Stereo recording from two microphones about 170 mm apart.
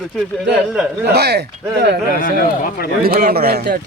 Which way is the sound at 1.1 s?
75° right (ahead or behind).